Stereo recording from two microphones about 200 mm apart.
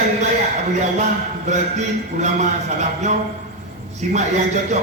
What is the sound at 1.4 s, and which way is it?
A man's voice, 35° right (ahead or behind).